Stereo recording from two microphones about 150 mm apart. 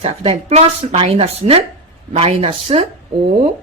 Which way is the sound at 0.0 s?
45° right (ahead or behind).